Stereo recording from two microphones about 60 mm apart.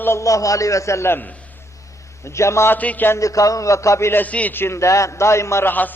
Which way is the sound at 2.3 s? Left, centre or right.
Left.